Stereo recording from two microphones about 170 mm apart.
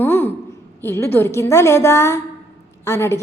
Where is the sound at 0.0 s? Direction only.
15° left (ahead or behind).